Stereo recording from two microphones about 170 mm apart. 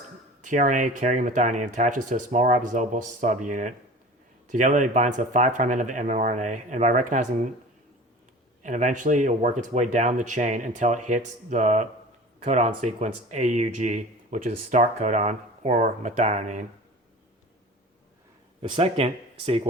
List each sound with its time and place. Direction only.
0.4 s speech: 50° right (ahead or behind)
8.6 s speech: 45° right (ahead or behind)
18.6 s speech: 30° right (ahead or behind)